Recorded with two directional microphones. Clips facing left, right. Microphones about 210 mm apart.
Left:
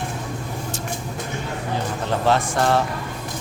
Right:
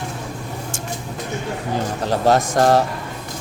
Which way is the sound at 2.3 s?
40° right (ahead or behind).